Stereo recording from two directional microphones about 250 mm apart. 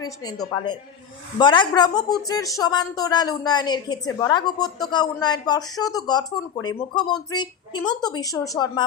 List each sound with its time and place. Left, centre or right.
0.0 s speech: centre